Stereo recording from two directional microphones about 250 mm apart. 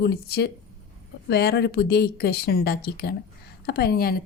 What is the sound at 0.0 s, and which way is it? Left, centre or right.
Speech, left.